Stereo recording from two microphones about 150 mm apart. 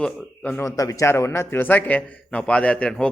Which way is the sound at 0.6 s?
20° left (ahead or behind).